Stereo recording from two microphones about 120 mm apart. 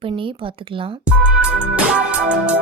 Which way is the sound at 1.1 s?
10° right (ahead or behind).